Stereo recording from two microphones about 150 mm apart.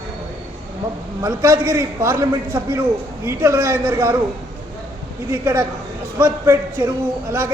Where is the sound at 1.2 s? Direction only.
20° right (ahead or behind).